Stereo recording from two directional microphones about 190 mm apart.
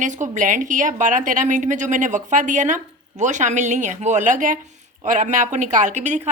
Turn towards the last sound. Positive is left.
turn(degrees=-40)  # may be behind; listen again after turning